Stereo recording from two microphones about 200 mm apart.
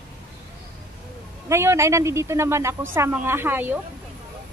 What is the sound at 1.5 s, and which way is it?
A woman's voice, 15° right (ahead or behind).